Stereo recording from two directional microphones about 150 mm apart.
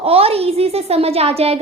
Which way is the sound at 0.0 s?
40° right (ahead or behind).